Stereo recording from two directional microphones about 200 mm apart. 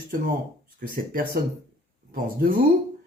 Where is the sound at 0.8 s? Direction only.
45° right (ahead or behind).